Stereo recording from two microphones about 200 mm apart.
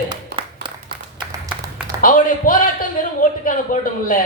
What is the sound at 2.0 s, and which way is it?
A man's voice, 45° left (ahead or behind).